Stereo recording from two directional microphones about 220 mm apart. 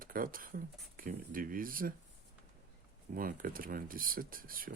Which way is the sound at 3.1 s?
40° right (ahead or behind).